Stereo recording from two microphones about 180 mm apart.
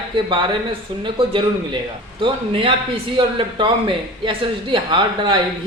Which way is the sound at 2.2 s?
30° right (ahead or behind).